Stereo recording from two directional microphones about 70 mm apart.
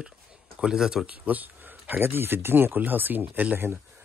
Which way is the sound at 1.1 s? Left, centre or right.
Right.